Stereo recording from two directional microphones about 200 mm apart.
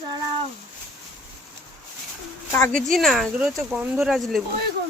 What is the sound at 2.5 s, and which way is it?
Speech, 5° left (ahead or behind).